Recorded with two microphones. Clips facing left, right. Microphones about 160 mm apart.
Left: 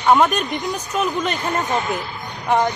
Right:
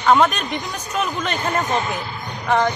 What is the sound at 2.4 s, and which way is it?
Music, 20° left (ahead or behind).